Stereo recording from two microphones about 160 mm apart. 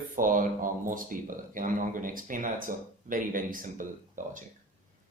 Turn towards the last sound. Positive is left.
turn(degrees=-55)  # may be behind; listen again after turning